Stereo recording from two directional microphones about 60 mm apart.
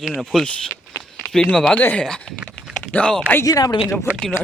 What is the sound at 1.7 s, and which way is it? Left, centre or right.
Speech, left.